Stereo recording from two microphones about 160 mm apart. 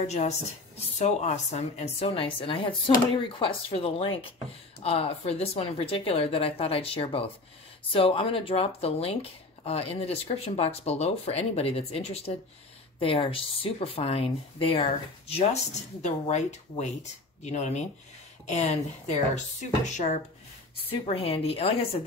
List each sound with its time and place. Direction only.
0.0 s speech: 45° left (ahead or behind)
2.0 s speech: 30° left (ahead or behind); by 20.2 s 50° left (ahead or behind)
20.9 s speech: 35° left (ahead or behind)